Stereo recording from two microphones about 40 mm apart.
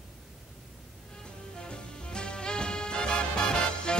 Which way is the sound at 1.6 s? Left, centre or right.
Left.